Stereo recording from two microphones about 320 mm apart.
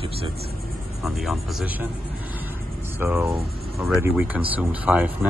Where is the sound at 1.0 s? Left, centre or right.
Centre.